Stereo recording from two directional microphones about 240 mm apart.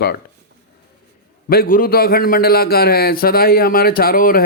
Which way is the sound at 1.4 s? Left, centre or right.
Left.